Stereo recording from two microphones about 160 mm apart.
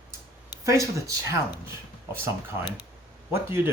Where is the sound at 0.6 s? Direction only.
20° right (ahead or behind).